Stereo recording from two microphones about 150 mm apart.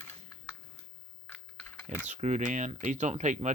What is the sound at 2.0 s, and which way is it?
Speech, 50° right (ahead or behind).